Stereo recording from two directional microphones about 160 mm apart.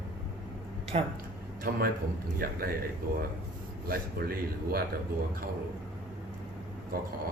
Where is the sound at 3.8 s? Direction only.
70° right (ahead or behind).